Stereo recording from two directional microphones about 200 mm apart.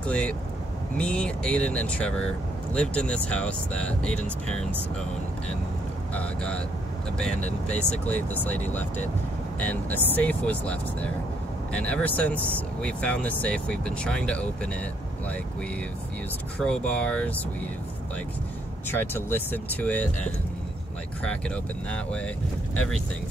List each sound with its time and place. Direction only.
0.0 s speech: 5° left (ahead or behind)
6.1 s speech: 5° left (ahead or behind)
7.6 s speech: 5° left (ahead or behind)
16.5 s speech: 5° left (ahead or behind)
18.9 s speech: 10° left (ahead or behind)
21.9 s speech: 5° left (ahead or behind)